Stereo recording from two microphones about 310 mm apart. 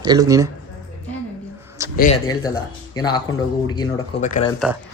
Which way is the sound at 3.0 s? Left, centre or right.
Centre.